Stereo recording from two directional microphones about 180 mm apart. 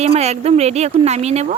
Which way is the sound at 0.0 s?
35° right (ahead or behind).